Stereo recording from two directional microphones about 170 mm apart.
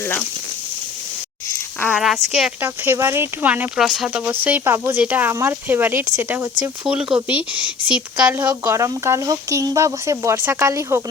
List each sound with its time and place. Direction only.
0.0 s speech: 10° left (ahead or behind)
2.0 s speech: centre (ahead or behind)
2.6 s speech: 15° right (ahead or behind)